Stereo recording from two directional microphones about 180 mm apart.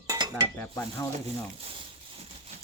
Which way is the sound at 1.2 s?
30° right (ahead or behind).